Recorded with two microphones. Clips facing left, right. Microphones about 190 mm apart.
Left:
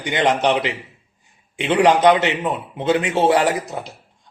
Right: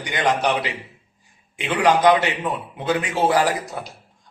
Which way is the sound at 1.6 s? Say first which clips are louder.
Left 3 dB; 25° left (ahead or behind).